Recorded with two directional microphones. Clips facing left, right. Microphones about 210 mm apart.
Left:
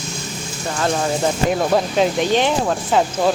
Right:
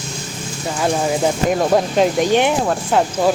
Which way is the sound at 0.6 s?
10° right (ahead or behind).